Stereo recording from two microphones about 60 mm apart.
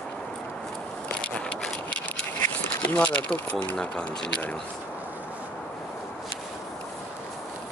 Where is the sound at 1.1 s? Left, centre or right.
Centre.